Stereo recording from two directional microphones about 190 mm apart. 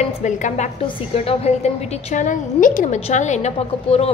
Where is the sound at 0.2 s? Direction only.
40° left (ahead or behind).